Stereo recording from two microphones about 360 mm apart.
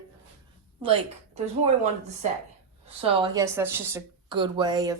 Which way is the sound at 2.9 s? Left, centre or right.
Centre.